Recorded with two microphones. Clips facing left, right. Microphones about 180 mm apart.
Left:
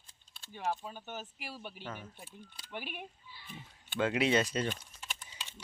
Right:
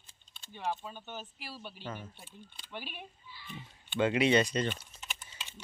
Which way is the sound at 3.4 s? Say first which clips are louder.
Right 3 dB; centre (ahead or behind).